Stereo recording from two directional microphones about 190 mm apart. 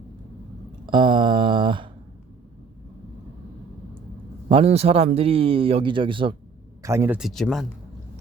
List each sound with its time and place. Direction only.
0.9 s a sound: 25° right (ahead or behind)
4.4 s speech: 30° right (ahead or behind)
6.8 s speech: 15° right (ahead or behind)
7.2 s speech: centre (ahead or behind)